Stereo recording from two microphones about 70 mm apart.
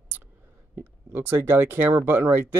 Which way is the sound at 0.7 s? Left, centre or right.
Right.